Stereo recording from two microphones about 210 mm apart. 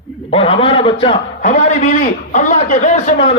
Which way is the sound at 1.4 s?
35° left (ahead or behind).